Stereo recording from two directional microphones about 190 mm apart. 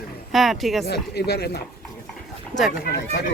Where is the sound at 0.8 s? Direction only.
60° left (ahead or behind).